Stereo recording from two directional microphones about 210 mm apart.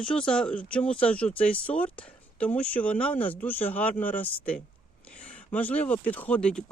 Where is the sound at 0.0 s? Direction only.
5° left (ahead or behind).